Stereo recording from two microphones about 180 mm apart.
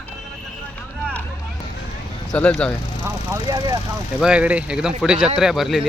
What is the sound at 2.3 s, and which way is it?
Speech, 5° left (ahead or behind).